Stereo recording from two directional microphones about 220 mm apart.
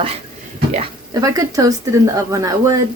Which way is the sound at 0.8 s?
15° right (ahead or behind).